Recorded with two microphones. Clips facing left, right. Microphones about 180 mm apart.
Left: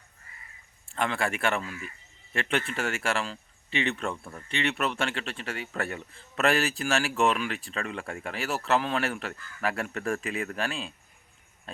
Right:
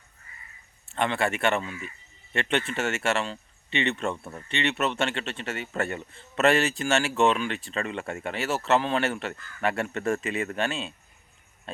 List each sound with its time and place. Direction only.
0.9 s a man's voice: centre (ahead or behind)